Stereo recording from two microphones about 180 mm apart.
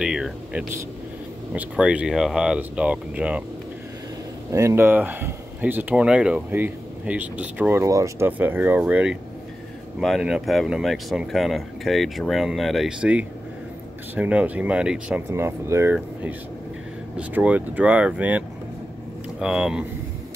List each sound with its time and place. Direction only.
0.0 s a sound: 5° right (ahead or behind)
1.5 s speech: 5° right (ahead or behind)
4.5 s speech: 15° right (ahead or behind)
19.4 s speech: 5° right (ahead or behind)